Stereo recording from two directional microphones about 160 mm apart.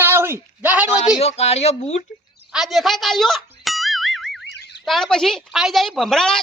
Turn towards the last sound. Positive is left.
turn(degrees=5)  # may be behind; listen again after turning